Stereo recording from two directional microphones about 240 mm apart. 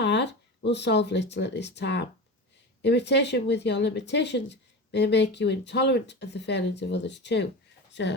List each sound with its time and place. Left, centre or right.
0.0 s speech: left